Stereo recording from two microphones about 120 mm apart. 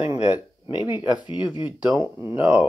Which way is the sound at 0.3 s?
40° left (ahead or behind).